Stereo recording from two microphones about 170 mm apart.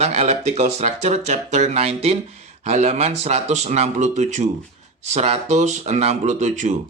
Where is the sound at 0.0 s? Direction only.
40° right (ahead or behind).